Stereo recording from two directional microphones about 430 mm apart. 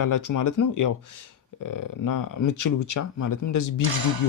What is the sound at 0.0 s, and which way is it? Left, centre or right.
Speech, left.